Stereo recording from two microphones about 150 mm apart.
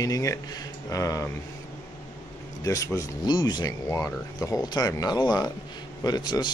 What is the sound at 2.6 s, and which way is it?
Speech, 20° left (ahead or behind).